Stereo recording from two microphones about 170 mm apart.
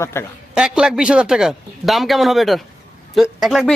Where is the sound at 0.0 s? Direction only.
15° left (ahead or behind).